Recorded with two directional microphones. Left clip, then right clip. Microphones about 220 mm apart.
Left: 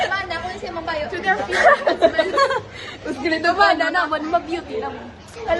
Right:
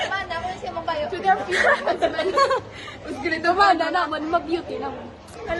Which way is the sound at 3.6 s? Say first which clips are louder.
Left 1 dB; 20° right (ahead or behind).